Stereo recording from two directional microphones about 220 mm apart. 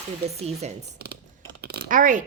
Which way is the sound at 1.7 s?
40° right (ahead or behind).